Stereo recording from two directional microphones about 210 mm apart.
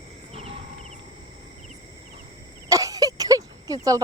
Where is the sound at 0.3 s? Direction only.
30° right (ahead or behind).